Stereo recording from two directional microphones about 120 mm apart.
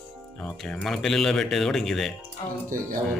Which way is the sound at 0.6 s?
5° left (ahead or behind).